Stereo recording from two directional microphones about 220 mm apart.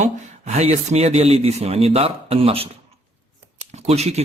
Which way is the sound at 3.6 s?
30° right (ahead or behind).